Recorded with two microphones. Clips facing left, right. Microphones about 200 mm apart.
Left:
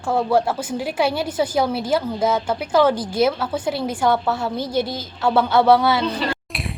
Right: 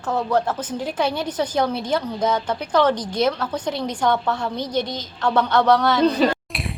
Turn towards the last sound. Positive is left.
turn(degrees=0)  # may be behind; listen again after turning